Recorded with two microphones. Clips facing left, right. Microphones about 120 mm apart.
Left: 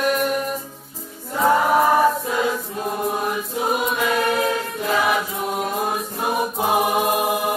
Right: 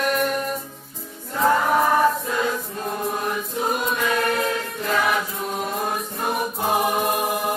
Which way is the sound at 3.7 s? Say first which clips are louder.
Left 3 dB; 5° left (ahead or behind).